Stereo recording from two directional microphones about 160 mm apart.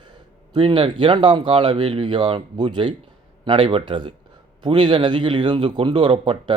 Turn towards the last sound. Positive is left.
turn(degrees=-30)  # may be behind; listen again after turning